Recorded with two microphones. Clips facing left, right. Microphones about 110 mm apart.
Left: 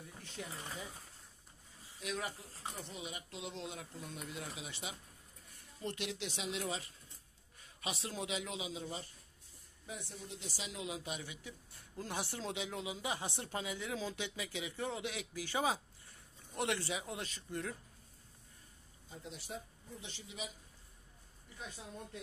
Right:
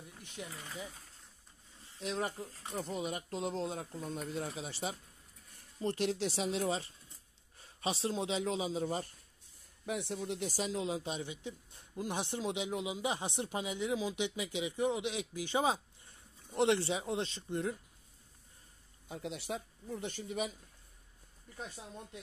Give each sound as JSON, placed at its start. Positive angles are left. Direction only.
{"t": 0.2, "sound": "speech", "side_deg": -15}
{"t": 2.0, "sound": "speech", "side_deg": -30}
{"t": 9.8, "sound": "speech", "side_deg": -75}
{"t": 10.7, "sound": "speech", "side_deg": -30}
{"t": 19.0, "sound": "speech", "side_deg": -75}
{"t": 20.0, "sound": "speech", "side_deg": -50}